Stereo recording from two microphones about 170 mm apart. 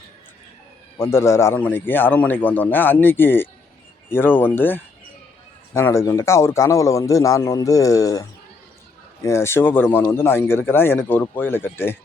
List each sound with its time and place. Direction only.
0.9 s speech: 15° left (ahead or behind)